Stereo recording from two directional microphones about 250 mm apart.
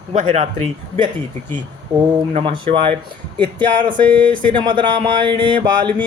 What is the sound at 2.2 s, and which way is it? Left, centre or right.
Speech, right.